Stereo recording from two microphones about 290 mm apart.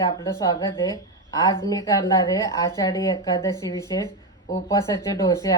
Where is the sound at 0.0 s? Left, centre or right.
Centre.